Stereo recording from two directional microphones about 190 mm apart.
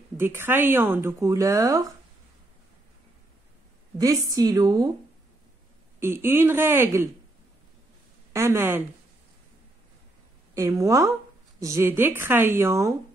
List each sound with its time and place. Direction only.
0.2 s speech: 10° right (ahead or behind)
4.0 s a woman's voice: 20° right (ahead or behind)
5.9 s speech: 10° right (ahead or behind)
8.3 s speech: 15° right (ahead or behind)
10.5 s a woman's voice: 15° right (ahead or behind)